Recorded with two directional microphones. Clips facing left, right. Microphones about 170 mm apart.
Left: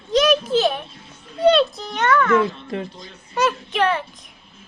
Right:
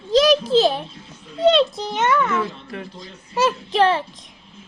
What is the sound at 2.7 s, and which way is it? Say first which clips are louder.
Speech: left 4 dB; 20° left (ahead or behind).